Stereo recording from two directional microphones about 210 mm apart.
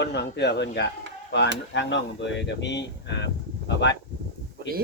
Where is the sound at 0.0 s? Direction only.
55° left (ahead or behind).